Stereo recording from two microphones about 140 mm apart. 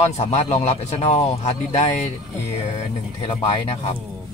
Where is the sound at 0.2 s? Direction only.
50° left (ahead or behind).